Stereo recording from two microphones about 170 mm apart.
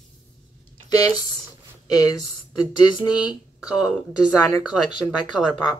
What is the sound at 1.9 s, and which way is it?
A woman's voice, 20° left (ahead or behind).